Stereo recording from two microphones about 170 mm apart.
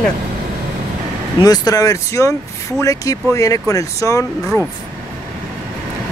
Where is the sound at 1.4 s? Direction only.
20° left (ahead or behind).